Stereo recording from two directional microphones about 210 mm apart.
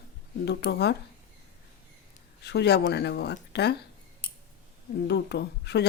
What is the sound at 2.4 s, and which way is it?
A woman's voice, 55° left (ahead or behind).